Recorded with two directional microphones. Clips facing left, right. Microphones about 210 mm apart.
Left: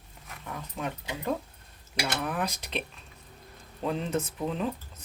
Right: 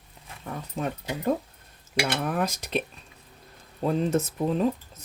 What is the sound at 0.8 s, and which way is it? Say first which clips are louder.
Speech: right 5 dB; 40° right (ahead or behind).